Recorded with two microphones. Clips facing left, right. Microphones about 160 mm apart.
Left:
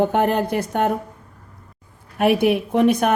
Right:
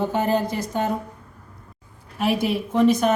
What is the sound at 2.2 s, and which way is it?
Speech, 60° left (ahead or behind).